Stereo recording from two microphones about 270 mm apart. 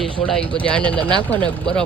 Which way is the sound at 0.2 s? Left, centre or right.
Centre.